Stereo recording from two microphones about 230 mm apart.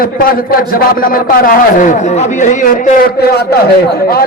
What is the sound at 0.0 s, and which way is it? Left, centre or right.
A man's voice, left.